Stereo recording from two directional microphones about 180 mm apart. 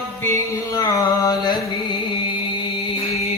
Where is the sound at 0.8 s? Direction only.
20° left (ahead or behind).